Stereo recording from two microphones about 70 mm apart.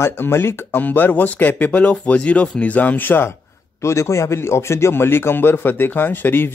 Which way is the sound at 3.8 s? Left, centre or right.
Left.